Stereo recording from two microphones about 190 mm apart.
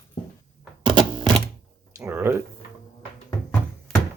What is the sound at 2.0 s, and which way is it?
Speech, 10° right (ahead or behind).